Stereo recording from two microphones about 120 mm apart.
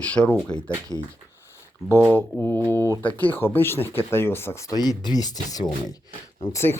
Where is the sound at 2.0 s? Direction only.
15° left (ahead or behind).